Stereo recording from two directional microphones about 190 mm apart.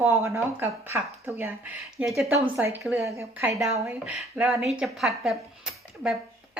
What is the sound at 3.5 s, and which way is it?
A woman's voice, centre (ahead or behind).